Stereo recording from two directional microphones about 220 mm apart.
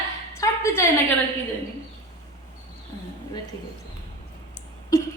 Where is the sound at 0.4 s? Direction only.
15° left (ahead or behind).